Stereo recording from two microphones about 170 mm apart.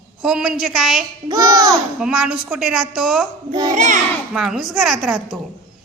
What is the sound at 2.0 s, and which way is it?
A woman's voice, 5° right (ahead or behind).